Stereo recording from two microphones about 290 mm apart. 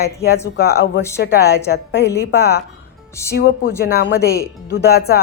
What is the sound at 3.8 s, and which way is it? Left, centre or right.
A woman's voice, left.